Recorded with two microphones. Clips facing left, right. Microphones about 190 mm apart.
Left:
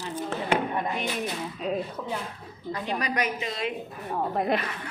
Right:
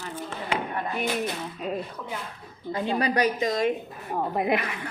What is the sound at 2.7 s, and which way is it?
A woman's voice, 30° right (ahead or behind).